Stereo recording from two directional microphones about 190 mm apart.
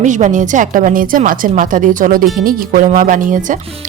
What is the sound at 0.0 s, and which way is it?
A woman's voice, 40° right (ahead or behind).